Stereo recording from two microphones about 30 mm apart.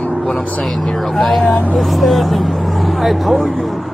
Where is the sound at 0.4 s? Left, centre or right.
Left.